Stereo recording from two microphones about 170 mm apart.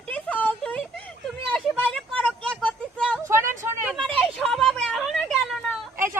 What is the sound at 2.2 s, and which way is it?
Vehicle, 5° left (ahead or behind).